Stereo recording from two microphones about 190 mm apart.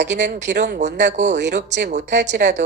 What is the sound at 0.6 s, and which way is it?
Speech, 40° right (ahead or behind).